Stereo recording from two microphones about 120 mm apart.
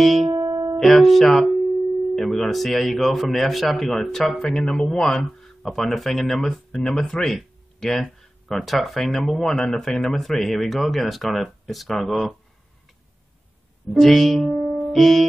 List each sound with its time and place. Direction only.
0.0 s speech: centre (ahead or behind)
0.3 s music: 25° right (ahead or behind)
0.7 s speech: centre (ahead or behind)
13.9 s music: centre (ahead or behind)